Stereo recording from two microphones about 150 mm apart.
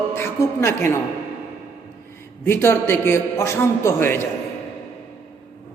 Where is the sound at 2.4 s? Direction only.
15° left (ahead or behind).